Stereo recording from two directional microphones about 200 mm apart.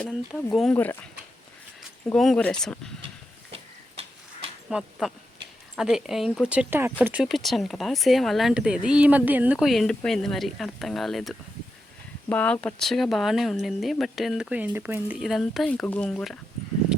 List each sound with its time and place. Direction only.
0.0 s speech: 5° left (ahead or behind)
2.1 s speech: 5° left (ahead or behind)
3.5 s tick-tock: 30° right (ahead or behind)
4.7 s speech: centre (ahead or behind)